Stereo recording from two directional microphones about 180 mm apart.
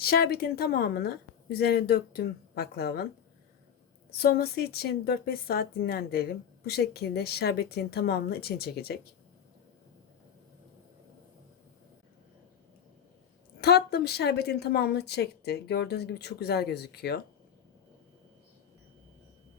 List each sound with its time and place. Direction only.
0.0 s a woman's voice: 55° left (ahead or behind)
4.1 s a woman's voice: 60° left (ahead or behind)
13.6 s a woman's voice: 65° left (ahead or behind)